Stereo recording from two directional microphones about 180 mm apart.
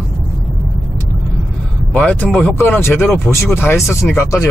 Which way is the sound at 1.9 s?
5° left (ahead or behind).